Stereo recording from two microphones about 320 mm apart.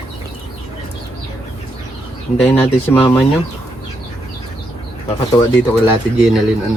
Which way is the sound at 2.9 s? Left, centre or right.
Centre.